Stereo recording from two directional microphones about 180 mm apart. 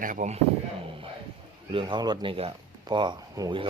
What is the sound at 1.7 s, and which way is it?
Speech, 25° right (ahead or behind).